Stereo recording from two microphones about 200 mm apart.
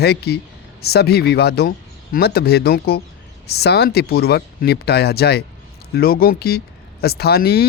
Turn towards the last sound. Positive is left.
turn(degrees=50)  # may be behind; listen again after turning